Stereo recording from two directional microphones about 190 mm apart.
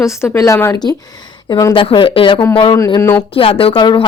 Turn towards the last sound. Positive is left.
turn(degrees=25)  # may be behind; listen again after turning